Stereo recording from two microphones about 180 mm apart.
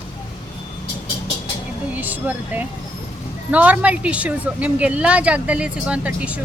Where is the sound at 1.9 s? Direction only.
10° right (ahead or behind).